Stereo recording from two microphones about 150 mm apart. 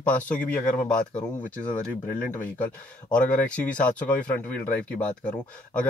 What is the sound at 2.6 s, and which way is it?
Speech, 10° left (ahead or behind).